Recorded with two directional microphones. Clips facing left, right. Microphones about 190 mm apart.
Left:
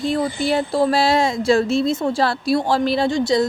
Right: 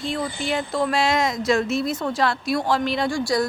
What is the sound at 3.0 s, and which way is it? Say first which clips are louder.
Speech: left 4 dB; 20° left (ahead or behind).